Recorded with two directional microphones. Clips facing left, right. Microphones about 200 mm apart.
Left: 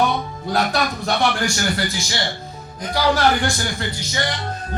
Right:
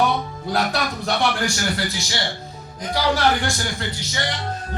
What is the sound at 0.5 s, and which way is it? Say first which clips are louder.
Speech: left 2 dB; 45° left (ahead or behind).